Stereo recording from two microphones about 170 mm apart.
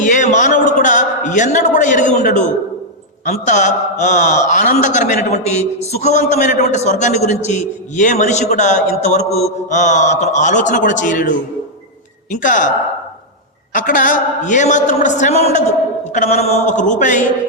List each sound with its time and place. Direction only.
0.0 s a sound: 45° left (ahead or behind)
3.2 s a man's voice: 45° left (ahead or behind)
13.7 s a man's voice: 50° left (ahead or behind)